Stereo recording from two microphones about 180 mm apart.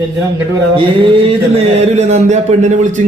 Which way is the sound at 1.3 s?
35° right (ahead or behind).